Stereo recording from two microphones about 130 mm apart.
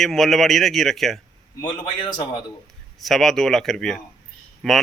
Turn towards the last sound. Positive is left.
turn(degrees=0)  # may be behind; listen again after turning